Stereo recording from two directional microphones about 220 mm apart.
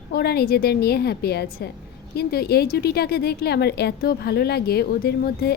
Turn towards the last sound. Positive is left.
turn(degrees=45)  # may be behind; listen again after turning